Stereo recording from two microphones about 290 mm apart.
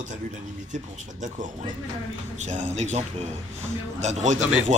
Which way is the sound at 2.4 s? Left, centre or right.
Right.